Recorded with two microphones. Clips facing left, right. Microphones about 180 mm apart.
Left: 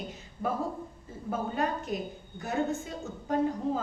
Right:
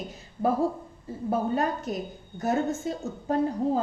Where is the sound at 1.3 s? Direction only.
40° right (ahead or behind).